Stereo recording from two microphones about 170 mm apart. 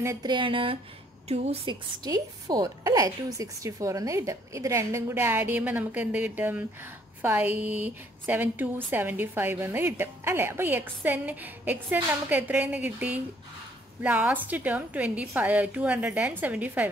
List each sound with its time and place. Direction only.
0.0 s a woman's voice: 20° right (ahead or behind); by 1.8 s 35° right (ahead or behind)
2.0 s a woman's voice: 20° right (ahead or behind)